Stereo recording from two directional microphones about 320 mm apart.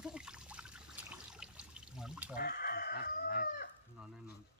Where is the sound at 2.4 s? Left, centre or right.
Left.